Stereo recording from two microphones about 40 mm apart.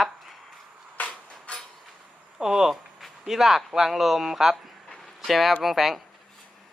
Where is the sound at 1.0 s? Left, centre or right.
Left.